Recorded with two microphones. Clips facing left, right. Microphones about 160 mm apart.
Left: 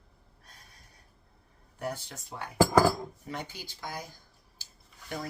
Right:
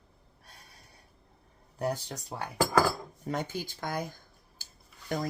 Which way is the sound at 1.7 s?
40° right (ahead or behind).